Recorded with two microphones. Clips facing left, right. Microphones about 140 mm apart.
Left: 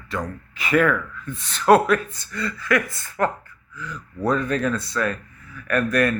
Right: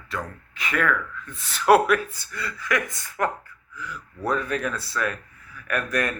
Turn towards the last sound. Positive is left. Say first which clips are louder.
# left 6 dB
turn(degrees=-15)  # may be behind; listen again after turning